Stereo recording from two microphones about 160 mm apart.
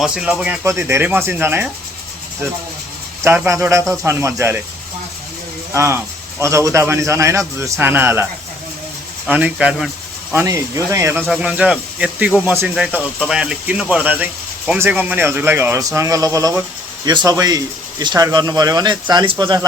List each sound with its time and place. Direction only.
0.0 s speech: 5° right (ahead or behind)
0.6 s speech: 15° right (ahead or behind)
3.2 s speech: 15° right (ahead or behind)
5.7 s speech: 15° right (ahead or behind)
10.3 s speech: 20° right (ahead or behind)
11.2 s speech: 5° right (ahead or behind); by 19.6 s 25° right (ahead or behind)